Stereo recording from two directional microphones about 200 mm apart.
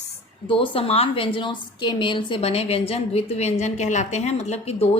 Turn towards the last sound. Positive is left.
turn(degrees=30)  # may be behind; listen again after turning